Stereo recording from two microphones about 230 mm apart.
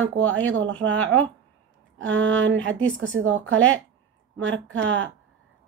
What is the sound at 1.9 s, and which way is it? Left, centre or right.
Speech, right.